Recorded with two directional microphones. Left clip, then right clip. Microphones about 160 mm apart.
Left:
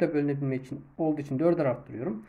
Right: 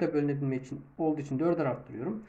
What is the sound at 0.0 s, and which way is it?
Speech, 35° left (ahead or behind).